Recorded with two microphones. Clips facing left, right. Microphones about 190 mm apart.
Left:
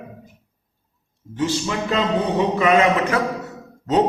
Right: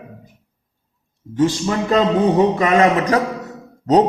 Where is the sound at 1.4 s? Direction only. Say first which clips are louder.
Right 5 dB; 40° right (ahead or behind).